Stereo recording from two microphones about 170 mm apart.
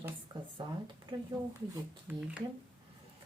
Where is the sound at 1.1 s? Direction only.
25° right (ahead or behind).